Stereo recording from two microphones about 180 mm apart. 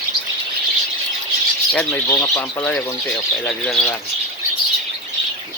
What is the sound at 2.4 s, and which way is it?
Speech, 5° left (ahead or behind).